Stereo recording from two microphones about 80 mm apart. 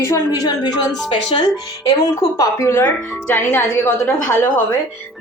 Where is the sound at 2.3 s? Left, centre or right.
Left.